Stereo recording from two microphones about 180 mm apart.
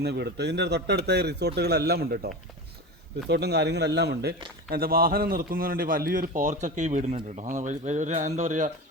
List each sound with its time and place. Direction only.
0.0 s a man's voice: 70° right (ahead or behind); by 8.7 s 45° right (ahead or behind)